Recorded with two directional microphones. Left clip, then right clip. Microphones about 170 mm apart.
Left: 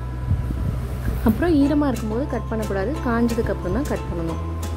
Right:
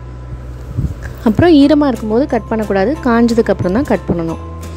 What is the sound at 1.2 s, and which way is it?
A woman's voice, 50° right (ahead or behind).